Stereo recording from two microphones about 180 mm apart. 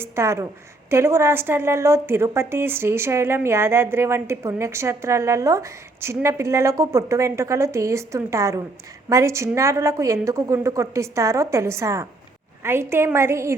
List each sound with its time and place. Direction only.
0.0 s a woman's voice: 15° right (ahead or behind)